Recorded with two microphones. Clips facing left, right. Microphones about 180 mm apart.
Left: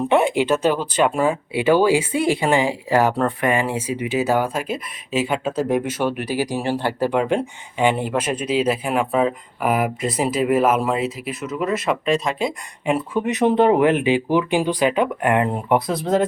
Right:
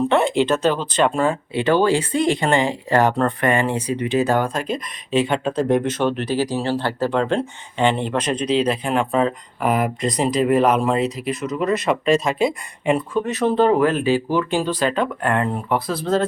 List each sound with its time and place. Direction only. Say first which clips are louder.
0.1 s speech: even; 10° left (ahead or behind)
13.1 s speech: left 4 dB; 15° left (ahead or behind)